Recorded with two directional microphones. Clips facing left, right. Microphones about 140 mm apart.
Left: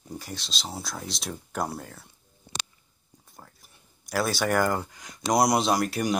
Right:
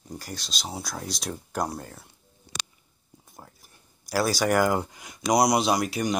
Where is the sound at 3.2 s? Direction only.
15° right (ahead or behind).